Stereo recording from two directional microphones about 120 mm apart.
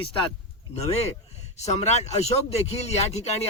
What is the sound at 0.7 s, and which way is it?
Speech, 60° left (ahead or behind).